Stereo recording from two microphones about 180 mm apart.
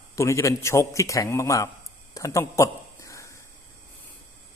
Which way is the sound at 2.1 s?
20° left (ahead or behind).